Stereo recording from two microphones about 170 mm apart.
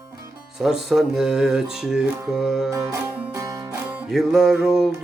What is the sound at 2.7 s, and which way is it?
Music, 20° right (ahead or behind).